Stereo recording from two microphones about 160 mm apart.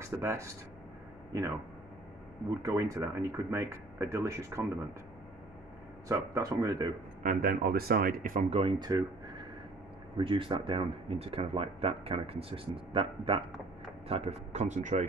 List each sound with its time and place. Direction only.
0.0 s speech: 15° right (ahead or behind)
2.6 s speech: 20° right (ahead or behind)
6.0 s speech: 20° right (ahead or behind)
7.2 s speech: 70° right (ahead or behind)
8.5 s speech: 30° right (ahead or behind); by 15.0 s 50° right (ahead or behind)